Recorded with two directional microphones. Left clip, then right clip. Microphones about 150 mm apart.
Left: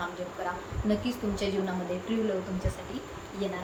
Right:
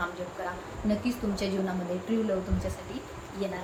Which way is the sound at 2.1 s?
20° right (ahead or behind).